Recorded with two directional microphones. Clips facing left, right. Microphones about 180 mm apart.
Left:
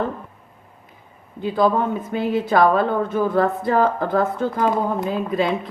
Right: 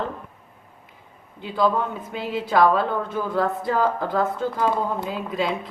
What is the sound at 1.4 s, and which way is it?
A woman's voice, 45° left (ahead or behind).